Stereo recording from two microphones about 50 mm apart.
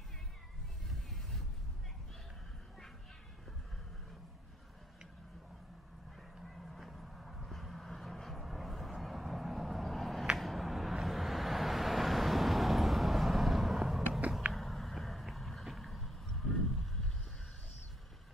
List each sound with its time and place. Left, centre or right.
0.8 s music: centre
6.3 s vehicle: centre
13.7 s a sound: centre